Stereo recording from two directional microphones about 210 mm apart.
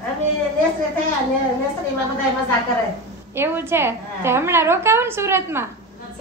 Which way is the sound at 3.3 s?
10° right (ahead or behind).